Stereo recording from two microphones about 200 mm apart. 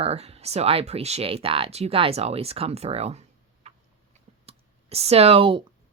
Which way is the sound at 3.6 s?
30° right (ahead or behind).